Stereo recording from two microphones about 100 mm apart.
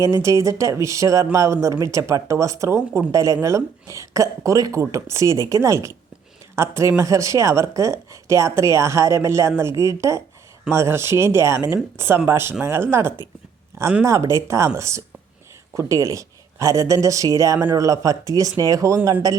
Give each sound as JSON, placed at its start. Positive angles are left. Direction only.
{"t": 0.0, "sound": "a woman's voice", "side_deg": -30}